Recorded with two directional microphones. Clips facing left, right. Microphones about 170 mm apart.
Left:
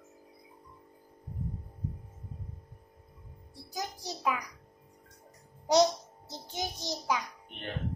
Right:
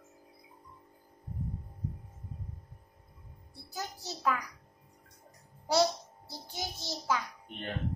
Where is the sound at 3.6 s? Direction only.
15° left (ahead or behind).